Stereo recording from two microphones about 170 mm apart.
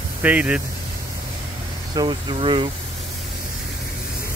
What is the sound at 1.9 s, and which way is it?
Speech, 30° right (ahead or behind).